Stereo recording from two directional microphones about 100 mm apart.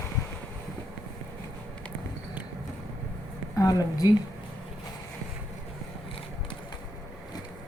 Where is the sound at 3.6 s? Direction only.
40° left (ahead or behind).